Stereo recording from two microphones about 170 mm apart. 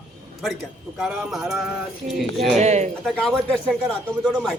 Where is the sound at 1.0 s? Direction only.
5° right (ahead or behind).